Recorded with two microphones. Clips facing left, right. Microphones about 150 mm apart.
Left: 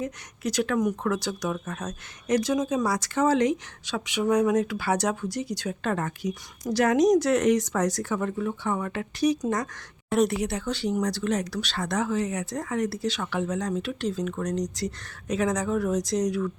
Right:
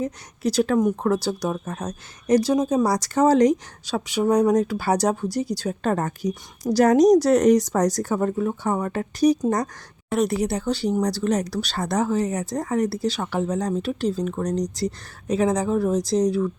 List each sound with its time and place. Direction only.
0.0 s speech: 35° right (ahead or behind)